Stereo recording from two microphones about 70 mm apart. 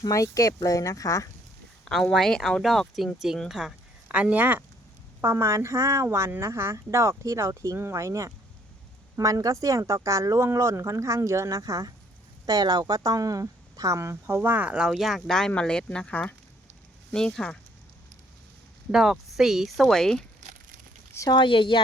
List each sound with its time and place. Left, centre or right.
0.1 s speech: left
1.8 s speech: centre
4.1 s speech: centre
5.2 s speech: right
9.1 s speech: right
12.5 s speech: right
14.7 s speech: centre
18.9 s speech: centre
21.1 s speech: left